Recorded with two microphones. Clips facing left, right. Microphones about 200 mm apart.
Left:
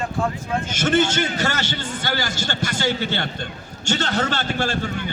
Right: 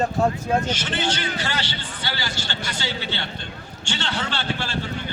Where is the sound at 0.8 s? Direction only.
45° left (ahead or behind).